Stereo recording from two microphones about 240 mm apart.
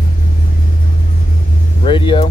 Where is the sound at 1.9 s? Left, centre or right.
Left.